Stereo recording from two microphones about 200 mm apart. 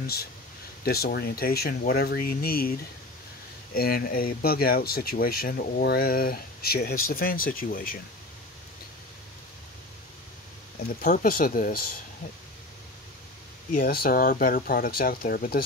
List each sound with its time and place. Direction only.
0.0 s speech: 50° left (ahead or behind)
3.7 s speech: 50° left (ahead or behind)
10.9 s speech: 45° left (ahead or behind)
13.7 s speech: 50° left (ahead or behind)